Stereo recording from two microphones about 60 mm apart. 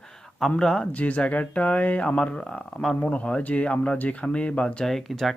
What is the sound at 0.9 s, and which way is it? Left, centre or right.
Speech, left.